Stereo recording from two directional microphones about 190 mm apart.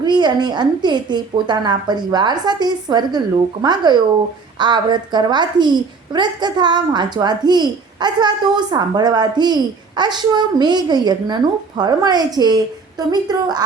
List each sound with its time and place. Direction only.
0.0 s a woman's voice: 20° right (ahead or behind)